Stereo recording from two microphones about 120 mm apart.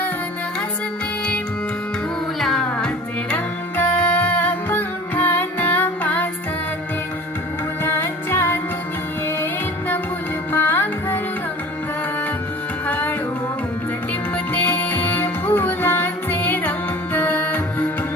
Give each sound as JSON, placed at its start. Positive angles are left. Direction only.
{"t": 2.4, "sound": "music", "side_deg": 5}
{"t": 7.9, "sound": "music", "side_deg": 20}
{"t": 10.5, "sound": "music", "side_deg": 15}
{"t": 12.9, "sound": "music", "side_deg": 15}
{"t": 14.3, "sound": "music", "side_deg": 15}